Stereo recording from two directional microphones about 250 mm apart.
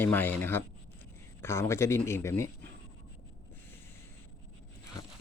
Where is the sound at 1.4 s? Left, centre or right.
Centre.